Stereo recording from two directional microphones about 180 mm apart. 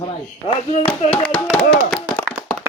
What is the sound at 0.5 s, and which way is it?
Speech, 30° left (ahead or behind).